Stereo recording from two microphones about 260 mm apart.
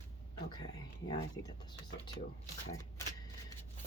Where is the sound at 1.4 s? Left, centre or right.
Left.